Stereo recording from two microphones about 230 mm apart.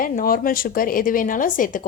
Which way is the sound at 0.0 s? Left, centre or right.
Left.